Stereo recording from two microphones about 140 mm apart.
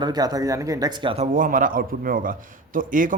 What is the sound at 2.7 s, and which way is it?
Speech, 70° right (ahead or behind).